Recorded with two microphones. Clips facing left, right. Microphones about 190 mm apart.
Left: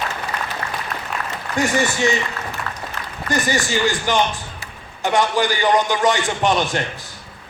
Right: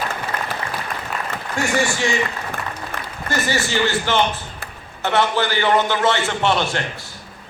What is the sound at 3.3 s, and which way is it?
A man's voice, 15° left (ahead or behind).